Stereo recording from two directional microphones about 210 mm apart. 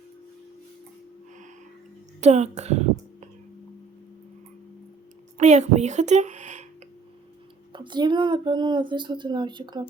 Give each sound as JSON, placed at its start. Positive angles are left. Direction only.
{"t": 2.2, "sound": "speech", "side_deg": -30}
{"t": 5.4, "sound": "speech", "side_deg": -35}
{"t": 7.7, "sound": "speech", "side_deg": -20}